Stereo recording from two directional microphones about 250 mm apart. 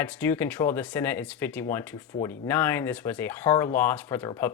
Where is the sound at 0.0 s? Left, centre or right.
Centre.